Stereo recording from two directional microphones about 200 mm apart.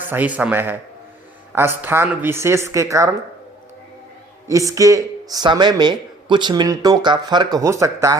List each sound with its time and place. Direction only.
0.0 s a woman's voice: 10° right (ahead or behind)
4.4 s speech: 15° right (ahead or behind)